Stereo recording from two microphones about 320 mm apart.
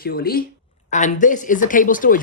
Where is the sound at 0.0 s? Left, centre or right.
Left.